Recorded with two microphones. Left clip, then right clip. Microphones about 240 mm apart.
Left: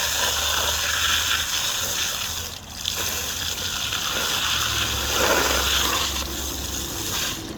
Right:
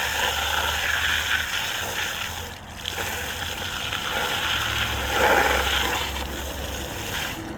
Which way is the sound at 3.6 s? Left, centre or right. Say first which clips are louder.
Left 2 dB; centre.